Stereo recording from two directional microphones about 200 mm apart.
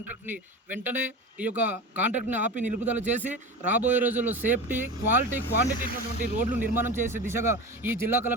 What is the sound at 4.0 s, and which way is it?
Speech, 10° right (ahead or behind).